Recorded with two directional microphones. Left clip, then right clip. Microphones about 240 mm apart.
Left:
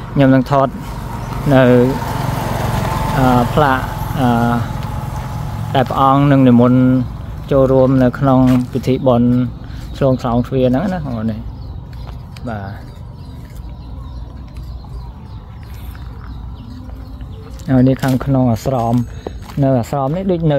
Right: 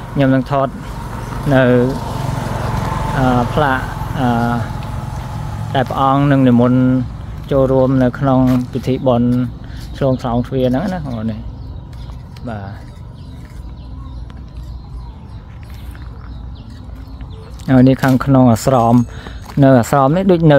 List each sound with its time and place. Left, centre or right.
0.2 s speech: centre
2.1 s vehicle: left
3.2 s speech: centre
4.7 s vehicle: left
5.7 s speech: centre
12.4 s speech: centre
17.6 s speech: centre